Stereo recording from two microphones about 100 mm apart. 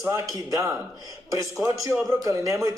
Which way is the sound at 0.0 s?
30° right (ahead or behind).